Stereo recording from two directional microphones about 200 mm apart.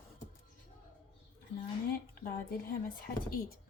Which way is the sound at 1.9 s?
45° left (ahead or behind).